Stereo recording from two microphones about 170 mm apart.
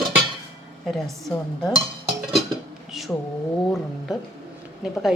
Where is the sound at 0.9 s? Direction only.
Centre (ahead or behind).